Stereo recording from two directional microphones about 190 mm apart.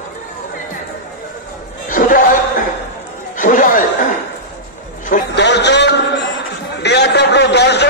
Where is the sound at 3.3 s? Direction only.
45° left (ahead or behind).